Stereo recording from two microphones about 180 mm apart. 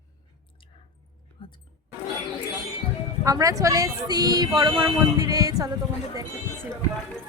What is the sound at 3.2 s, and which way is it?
Speech, 20° right (ahead or behind).